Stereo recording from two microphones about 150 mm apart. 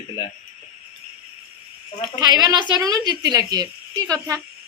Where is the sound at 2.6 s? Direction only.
25° right (ahead or behind).